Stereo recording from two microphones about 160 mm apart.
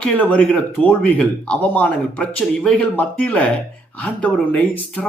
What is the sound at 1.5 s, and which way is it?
Speech, 10° left (ahead or behind).